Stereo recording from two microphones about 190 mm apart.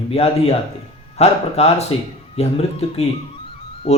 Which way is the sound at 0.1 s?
30° left (ahead or behind).